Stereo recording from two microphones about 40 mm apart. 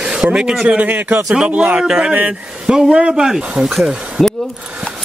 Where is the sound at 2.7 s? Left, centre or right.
Centre.